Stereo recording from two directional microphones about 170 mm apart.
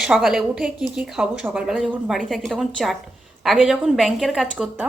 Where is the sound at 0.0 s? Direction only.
5° right (ahead or behind).